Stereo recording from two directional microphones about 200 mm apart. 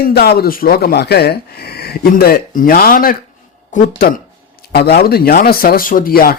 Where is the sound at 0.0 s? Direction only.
50° left (ahead or behind).